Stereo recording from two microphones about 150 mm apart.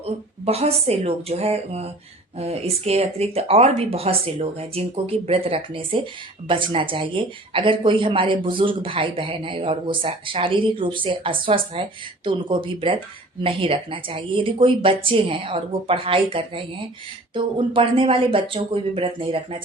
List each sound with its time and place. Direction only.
0.0 s speech: 40° right (ahead or behind)